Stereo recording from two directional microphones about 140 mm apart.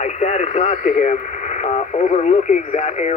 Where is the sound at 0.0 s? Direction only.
55° left (ahead or behind).